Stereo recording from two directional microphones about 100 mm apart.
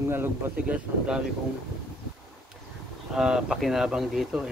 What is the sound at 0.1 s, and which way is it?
Speech, 20° right (ahead or behind).